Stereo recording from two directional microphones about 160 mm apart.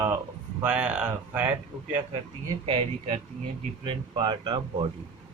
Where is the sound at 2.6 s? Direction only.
30° right (ahead or behind).